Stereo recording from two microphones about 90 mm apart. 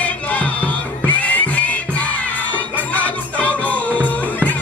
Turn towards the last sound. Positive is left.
turn(degrees=15)  # may be behind; listen again after turning